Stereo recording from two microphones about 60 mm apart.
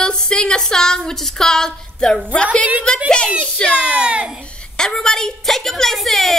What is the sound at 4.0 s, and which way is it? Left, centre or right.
Speech, centre.